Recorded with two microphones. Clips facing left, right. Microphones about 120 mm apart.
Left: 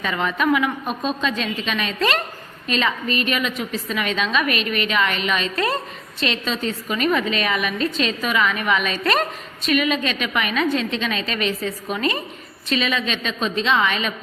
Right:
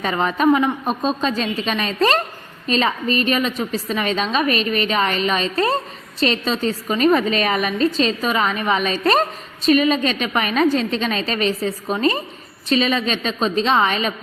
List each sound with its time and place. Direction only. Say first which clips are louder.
0.0 s a woman's voice: right 4 dB; 35° right (ahead or behind)